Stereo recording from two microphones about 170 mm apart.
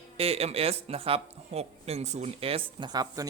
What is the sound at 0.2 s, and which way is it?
Speech, 35° right (ahead or behind).